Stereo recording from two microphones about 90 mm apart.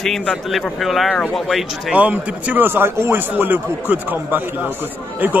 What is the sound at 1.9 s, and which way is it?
A man's voice, 15° right (ahead or behind).